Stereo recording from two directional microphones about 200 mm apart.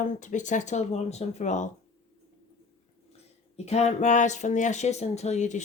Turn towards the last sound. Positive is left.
turn(degrees=35)  # may be behind; listen again after turning